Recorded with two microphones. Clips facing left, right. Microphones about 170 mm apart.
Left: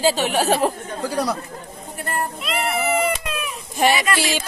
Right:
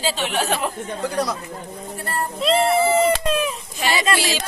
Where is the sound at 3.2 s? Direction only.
30° right (ahead or behind).